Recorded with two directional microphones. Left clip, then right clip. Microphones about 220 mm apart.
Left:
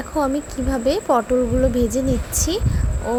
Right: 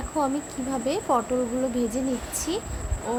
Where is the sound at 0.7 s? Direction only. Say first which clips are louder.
Left 6 dB; 20° left (ahead or behind).